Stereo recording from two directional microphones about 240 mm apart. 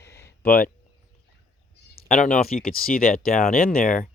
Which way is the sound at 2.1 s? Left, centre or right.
Left.